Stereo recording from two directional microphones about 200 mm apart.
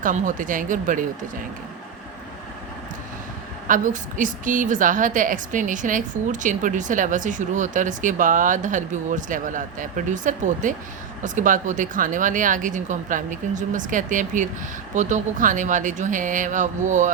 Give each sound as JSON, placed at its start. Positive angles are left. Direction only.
{"t": 0.0, "sound": "a woman's voice", "side_deg": -40}
{"t": 3.7, "sound": "a woman's voice", "side_deg": -40}